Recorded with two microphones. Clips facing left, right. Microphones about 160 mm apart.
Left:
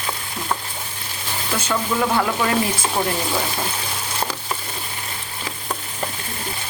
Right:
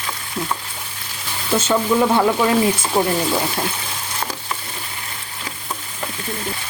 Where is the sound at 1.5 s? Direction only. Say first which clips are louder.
Right 6 dB; 25° right (ahead or behind).